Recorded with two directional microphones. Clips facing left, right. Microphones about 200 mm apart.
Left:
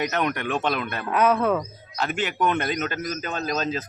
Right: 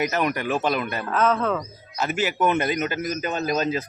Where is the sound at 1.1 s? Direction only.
10° left (ahead or behind).